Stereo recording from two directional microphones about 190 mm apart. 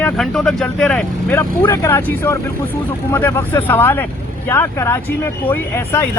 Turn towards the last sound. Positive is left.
turn(degrees=10)  # may be behind; listen again after turning